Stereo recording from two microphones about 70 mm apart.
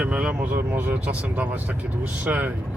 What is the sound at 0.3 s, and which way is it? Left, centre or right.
Speech, right.